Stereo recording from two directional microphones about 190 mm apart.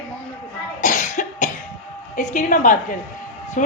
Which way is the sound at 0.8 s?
45° left (ahead or behind).